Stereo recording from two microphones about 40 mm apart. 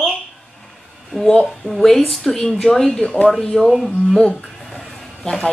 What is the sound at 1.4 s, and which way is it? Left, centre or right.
A woman's voice, centre.